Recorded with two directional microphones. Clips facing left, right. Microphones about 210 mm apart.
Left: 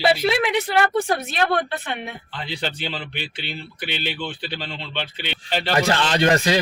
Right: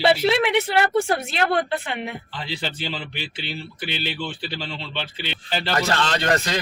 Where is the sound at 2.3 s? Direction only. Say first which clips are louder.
Left 1 dB; 5° right (ahead or behind).